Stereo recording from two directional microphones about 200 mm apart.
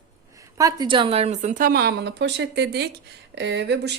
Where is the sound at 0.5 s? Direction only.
20° right (ahead or behind).